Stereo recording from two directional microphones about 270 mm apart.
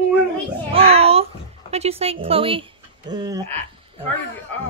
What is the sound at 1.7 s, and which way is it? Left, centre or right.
Speech, right.